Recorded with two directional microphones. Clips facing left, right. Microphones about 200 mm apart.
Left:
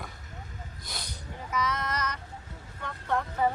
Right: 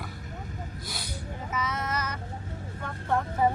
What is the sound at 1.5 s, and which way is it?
Female singing, 10° right (ahead or behind).